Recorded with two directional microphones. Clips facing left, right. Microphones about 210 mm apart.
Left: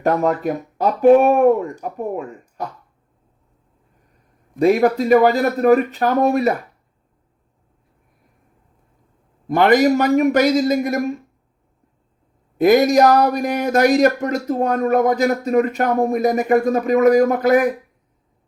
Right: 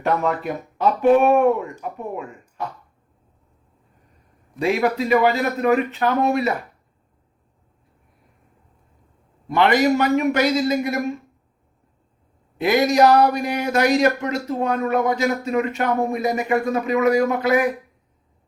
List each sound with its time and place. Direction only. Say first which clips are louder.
0.0 s speech: left 4 dB; 40° left (ahead or behind)
4.6 s speech: left 5 dB; 45° left (ahead or behind)
9.5 s speech: left 3 dB; 45° left (ahead or behind)
12.5 s speech: left 4 dB; 45° left (ahead or behind)